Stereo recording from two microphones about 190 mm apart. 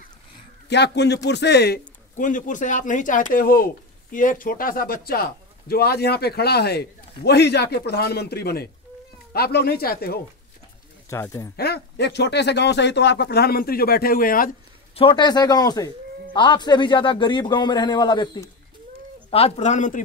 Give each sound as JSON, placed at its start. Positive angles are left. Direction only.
{"t": 0.7, "sound": "speech", "side_deg": 65}
{"t": 2.1, "sound": "speech", "side_deg": 45}
{"t": 11.1, "sound": "speech", "side_deg": 15}
{"t": 11.5, "sound": "speech", "side_deg": 55}
{"t": 15.0, "sound": "a man's voice", "side_deg": 25}